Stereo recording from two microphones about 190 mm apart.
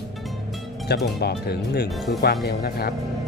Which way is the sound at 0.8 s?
60° left (ahead or behind).